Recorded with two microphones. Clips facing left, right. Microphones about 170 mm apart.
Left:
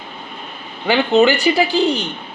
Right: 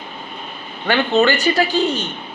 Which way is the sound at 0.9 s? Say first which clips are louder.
Left 2 dB; 15° left (ahead or behind).